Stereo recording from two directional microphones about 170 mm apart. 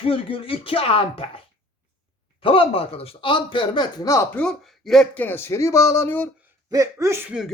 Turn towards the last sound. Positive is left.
turn(degrees=-5)  # may be behind; listen again after turning